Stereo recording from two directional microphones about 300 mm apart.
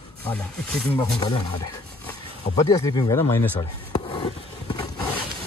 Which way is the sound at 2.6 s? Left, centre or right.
Centre.